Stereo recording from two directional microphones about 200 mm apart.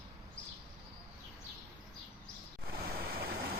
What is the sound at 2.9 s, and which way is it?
Waves, 50° right (ahead or behind).